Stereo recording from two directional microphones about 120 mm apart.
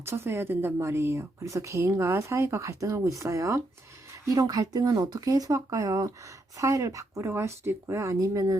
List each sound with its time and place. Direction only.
0.0 s speech: 20° right (ahead or behind)